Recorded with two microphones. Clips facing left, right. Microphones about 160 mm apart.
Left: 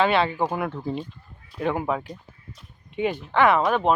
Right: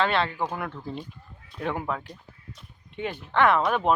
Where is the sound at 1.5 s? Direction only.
5° left (ahead or behind).